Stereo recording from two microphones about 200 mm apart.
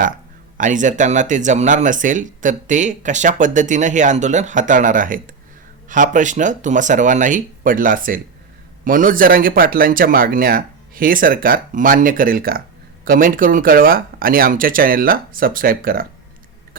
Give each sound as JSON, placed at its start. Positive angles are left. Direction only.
{"t": 0.5, "sound": "speech", "side_deg": -40}